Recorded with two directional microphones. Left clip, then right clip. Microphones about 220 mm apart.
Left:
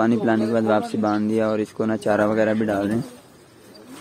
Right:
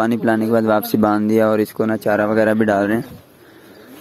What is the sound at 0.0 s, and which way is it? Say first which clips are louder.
Speech: right 3 dB; 25° right (ahead or behind).